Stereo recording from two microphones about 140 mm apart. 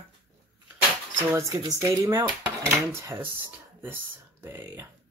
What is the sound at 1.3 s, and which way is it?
Speech, 20° right (ahead or behind).